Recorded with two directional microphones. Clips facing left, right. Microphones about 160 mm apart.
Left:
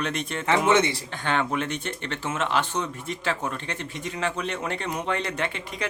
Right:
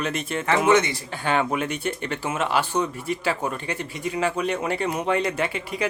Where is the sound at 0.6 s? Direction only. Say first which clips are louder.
Right 3 dB; 25° left (ahead or behind).